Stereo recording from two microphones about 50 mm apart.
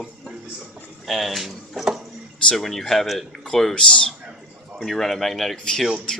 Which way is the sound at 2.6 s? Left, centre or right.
Centre.